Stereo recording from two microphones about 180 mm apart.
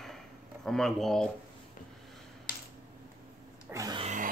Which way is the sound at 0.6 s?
Centre (ahead or behind).